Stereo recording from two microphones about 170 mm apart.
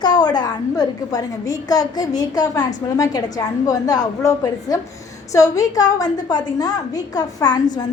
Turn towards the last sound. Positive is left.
turn(degrees=25)  # may be behind; listen again after turning